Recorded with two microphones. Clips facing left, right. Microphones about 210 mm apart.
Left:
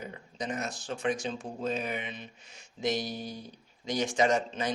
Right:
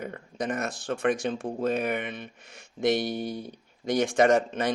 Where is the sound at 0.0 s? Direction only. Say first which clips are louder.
Right 6 dB; 55° right (ahead or behind).